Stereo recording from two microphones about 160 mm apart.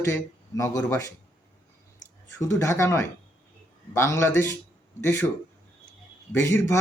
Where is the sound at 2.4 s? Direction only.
15° left (ahead or behind).